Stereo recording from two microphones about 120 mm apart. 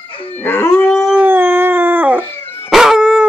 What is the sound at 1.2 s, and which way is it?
Howl, 20° right (ahead or behind).